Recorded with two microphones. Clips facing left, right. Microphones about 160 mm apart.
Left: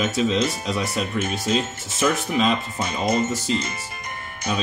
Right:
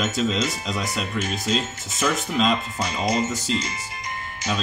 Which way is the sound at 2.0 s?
10° left (ahead or behind).